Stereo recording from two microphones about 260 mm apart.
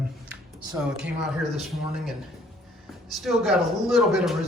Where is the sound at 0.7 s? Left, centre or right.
Centre.